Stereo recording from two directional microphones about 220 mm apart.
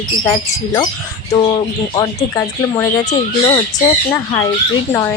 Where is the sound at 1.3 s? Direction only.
20° left (ahead or behind).